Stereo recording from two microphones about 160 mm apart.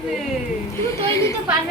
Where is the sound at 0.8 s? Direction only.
20° left (ahead or behind).